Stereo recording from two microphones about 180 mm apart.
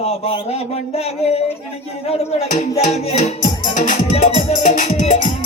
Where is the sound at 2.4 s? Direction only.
45° left (ahead or behind).